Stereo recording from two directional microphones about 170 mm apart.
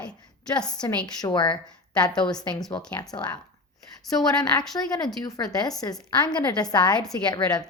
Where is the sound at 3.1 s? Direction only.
25° left (ahead or behind).